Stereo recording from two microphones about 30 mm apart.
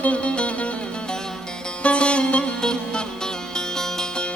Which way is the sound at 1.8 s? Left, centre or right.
Left.